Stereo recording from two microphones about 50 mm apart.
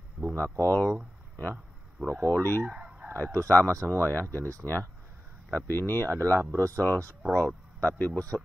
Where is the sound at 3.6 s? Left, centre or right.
Right.